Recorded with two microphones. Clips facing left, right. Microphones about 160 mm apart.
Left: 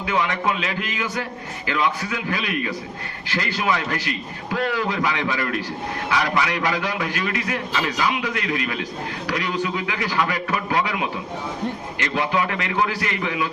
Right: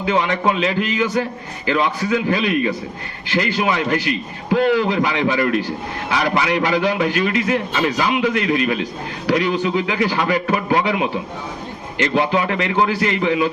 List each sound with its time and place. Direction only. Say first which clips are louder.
0.0 s a man's voice: right 5 dB; 25° right (ahead or behind)